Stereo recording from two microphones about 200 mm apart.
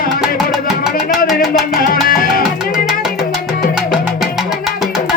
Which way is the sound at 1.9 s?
45° left (ahead or behind).